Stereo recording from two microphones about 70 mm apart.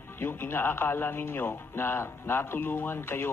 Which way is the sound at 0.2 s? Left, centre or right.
Left.